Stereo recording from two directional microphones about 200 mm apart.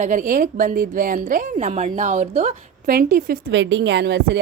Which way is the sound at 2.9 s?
45° right (ahead or behind).